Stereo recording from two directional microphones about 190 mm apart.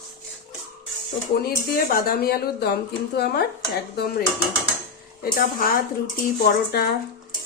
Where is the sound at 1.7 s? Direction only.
50° left (ahead or behind).